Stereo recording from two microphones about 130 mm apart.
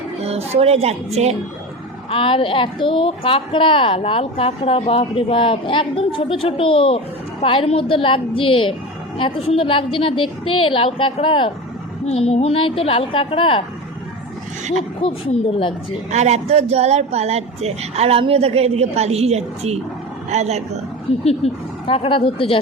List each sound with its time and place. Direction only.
0.2 s a woman's voice: 55° right (ahead or behind)
2.0 s a woman's voice: 45° left (ahead or behind)
12.0 s a woman's voice: 55° left (ahead or behind)
15.0 s a woman's voice: 45° left (ahead or behind)
16.1 s speech: 55° right (ahead or behind)
21.2 s a woman's voice: 50° left (ahead or behind)